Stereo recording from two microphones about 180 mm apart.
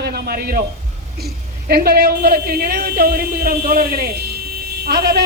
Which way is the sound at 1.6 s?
60° right (ahead or behind).